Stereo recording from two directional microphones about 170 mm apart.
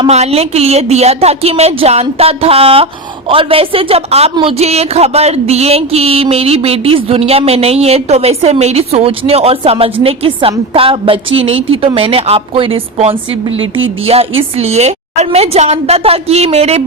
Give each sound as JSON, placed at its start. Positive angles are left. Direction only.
{"t": 0.1, "sound": "a woman's voice", "side_deg": -40}